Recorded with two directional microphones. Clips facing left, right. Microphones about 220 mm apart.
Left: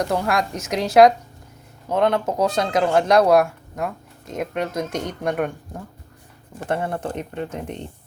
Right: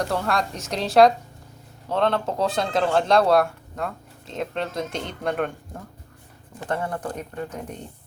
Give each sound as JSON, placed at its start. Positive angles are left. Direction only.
{"t": 0.0, "sound": "speech", "side_deg": 20}
{"t": 4.9, "sound": "speech", "side_deg": 45}
{"t": 5.2, "sound": "speech", "side_deg": 10}
{"t": 6.7, "sound": "speech", "side_deg": 25}